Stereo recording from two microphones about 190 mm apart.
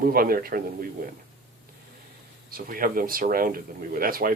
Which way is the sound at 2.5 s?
50° right (ahead or behind).